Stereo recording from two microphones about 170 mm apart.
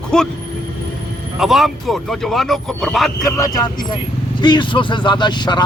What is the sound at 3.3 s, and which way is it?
Speech, 20° left (ahead or behind).